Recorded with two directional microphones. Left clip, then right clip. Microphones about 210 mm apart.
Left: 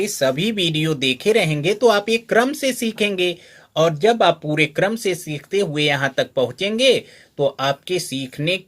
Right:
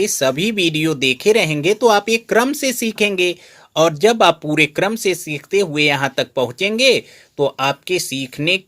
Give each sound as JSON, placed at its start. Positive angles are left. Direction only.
{"t": 0.0, "sound": "speech", "side_deg": -35}